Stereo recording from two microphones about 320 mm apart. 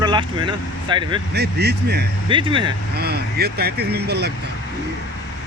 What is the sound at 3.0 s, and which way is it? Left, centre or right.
Speech, right.